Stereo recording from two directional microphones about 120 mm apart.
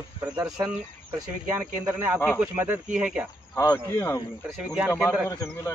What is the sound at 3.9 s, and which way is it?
Speech, 25° left (ahead or behind).